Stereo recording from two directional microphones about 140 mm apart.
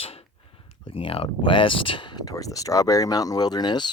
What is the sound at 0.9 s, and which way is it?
Speech, 40° left (ahead or behind).